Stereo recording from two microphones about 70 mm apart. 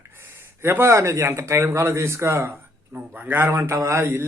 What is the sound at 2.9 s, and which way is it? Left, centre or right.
Speech, right.